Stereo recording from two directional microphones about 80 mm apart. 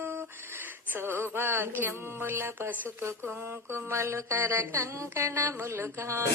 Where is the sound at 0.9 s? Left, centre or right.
Right.